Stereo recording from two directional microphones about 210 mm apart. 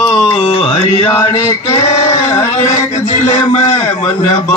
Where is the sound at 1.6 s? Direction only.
25° left (ahead or behind).